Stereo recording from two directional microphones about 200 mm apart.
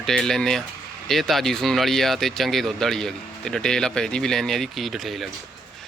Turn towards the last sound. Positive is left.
turn(degrees=0)  # may be behind; listen again after turning